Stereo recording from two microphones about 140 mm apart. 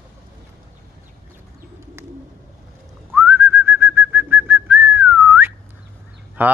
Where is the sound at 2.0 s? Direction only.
20° right (ahead or behind).